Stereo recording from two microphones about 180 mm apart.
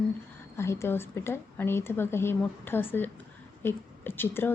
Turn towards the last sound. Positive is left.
turn(degrees=10)  # may be behind; listen again after turning